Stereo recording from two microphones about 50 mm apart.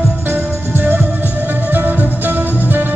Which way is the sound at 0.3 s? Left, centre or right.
Right.